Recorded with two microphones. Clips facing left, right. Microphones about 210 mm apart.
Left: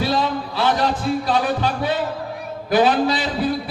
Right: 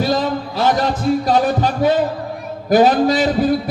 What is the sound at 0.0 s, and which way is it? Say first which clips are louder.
Music: right 3 dB; 45° right (ahead or behind).